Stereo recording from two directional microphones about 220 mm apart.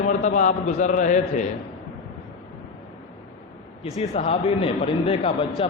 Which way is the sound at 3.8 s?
30° left (ahead or behind).